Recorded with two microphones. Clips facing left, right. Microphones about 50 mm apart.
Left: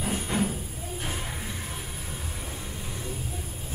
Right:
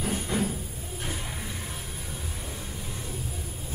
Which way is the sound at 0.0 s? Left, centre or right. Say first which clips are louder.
Left 1 dB; centre.